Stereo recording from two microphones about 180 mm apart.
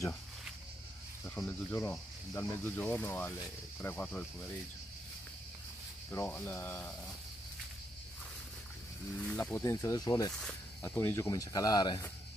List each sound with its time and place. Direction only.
1.2 s speech: 5° left (ahead or behind)
6.1 s speech: 10° left (ahead or behind)
9.2 s speech: 10° left (ahead or behind)